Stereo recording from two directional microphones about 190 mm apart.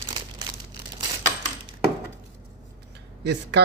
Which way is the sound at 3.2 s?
60° right (ahead or behind).